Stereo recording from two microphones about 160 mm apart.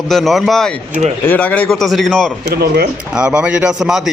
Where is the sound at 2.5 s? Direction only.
75° right (ahead or behind).